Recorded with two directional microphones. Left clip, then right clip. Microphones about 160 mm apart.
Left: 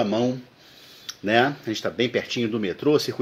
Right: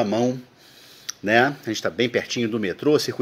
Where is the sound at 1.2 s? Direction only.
20° right (ahead or behind).